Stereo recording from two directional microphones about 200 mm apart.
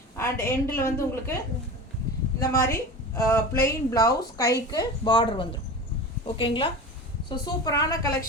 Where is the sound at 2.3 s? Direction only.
15° left (ahead or behind).